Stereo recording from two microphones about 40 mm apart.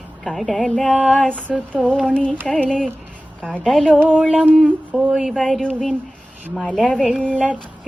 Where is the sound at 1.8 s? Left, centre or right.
Centre.